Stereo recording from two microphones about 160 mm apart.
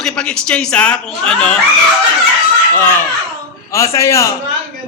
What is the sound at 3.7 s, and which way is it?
Speech, 20° left (ahead or behind).